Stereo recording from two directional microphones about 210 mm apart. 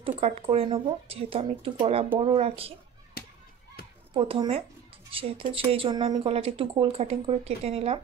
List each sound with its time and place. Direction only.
0.2 s speech: 30° right (ahead or behind)
3.2 s chop: 50° left (ahead or behind)
4.1 s speech: 25° right (ahead or behind)